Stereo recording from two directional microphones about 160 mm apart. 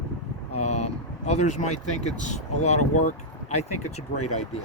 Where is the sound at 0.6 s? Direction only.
45° left (ahead or behind).